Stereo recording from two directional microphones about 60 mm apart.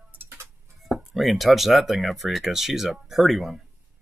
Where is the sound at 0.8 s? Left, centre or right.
Centre.